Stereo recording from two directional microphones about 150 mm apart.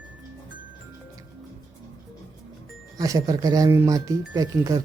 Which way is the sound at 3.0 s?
25° right (ahead or behind).